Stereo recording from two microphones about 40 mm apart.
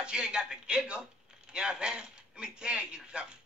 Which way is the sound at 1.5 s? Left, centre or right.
Right.